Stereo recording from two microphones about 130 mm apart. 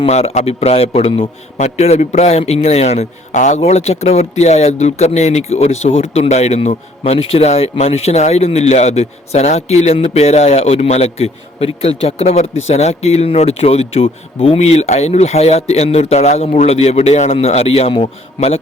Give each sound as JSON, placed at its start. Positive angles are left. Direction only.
{"t": 0.0, "sound": "a man's voice", "side_deg": 55}
{"t": 1.6, "sound": "a man's voice", "side_deg": 55}